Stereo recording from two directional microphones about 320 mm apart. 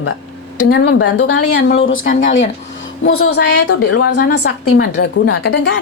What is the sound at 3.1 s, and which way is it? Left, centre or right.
A woman's voice, left.